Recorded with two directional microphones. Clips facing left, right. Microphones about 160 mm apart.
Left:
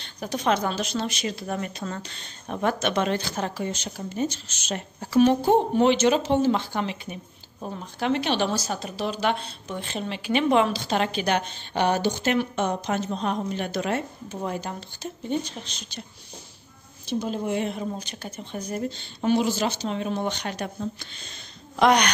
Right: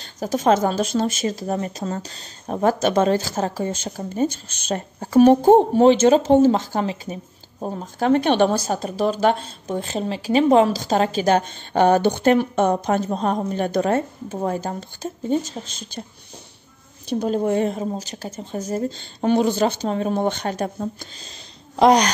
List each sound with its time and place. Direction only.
0.5 s a woman's voice: 45° right (ahead or behind)
17.2 s a woman's voice: 45° right (ahead or behind)